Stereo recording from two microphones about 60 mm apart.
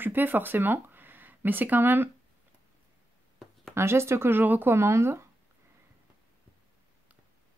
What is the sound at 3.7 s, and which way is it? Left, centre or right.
Speech, right.